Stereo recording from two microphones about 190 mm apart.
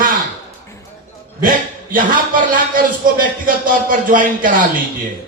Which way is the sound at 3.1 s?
45° right (ahead or behind).